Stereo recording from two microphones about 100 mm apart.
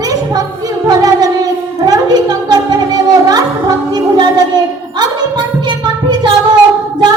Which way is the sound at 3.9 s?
45° right (ahead or behind).